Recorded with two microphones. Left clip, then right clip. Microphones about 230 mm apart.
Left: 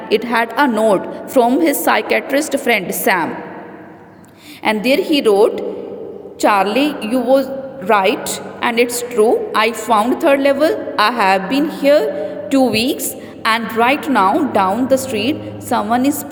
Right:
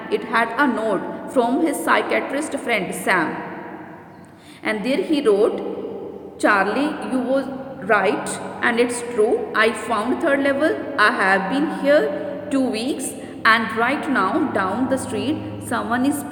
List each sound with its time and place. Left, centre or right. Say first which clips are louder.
0.1 s a woman's voice: left 5 dB; left
4.6 s a woman's voice: left 7 dB; left